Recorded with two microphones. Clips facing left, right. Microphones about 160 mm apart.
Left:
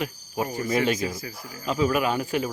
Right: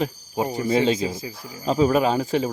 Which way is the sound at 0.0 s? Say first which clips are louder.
Right 4 dB; 25° right (ahead or behind).